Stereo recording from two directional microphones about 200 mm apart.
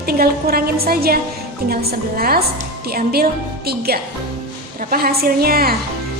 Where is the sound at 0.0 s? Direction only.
50° right (ahead or behind).